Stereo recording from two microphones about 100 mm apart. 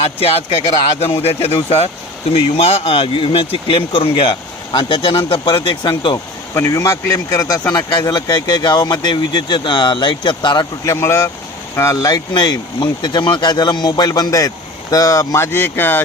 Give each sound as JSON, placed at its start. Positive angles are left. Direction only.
{"t": 1.2, "sound": "speech", "side_deg": 85}
{"t": 6.5, "sound": "speech", "side_deg": 30}
{"t": 10.9, "sound": "speech", "side_deg": 25}
{"t": 15.5, "sound": "speech", "side_deg": 20}